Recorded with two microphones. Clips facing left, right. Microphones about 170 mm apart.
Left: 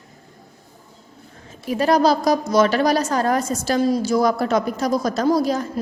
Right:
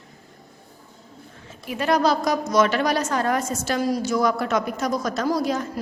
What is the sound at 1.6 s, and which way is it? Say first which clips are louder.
A woman's voice: left 4 dB; 35° left (ahead or behind).